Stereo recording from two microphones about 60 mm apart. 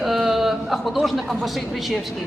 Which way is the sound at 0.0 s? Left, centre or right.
Centre.